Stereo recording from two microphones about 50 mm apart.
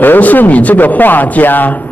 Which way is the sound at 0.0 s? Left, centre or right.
Left.